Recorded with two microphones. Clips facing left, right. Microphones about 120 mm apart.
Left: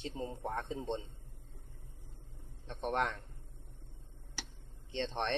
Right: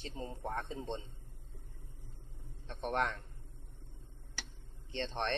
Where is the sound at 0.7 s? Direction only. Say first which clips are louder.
Left 3 dB; 15° left (ahead or behind).